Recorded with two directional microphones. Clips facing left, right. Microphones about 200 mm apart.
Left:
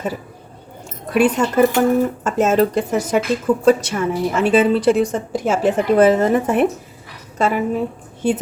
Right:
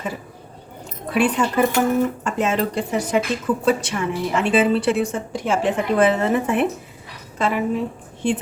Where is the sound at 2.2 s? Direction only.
45° left (ahead or behind).